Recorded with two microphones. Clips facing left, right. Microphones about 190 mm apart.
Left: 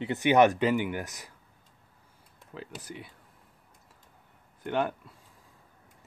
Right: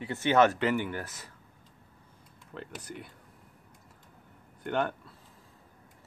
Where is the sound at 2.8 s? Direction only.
Centre (ahead or behind).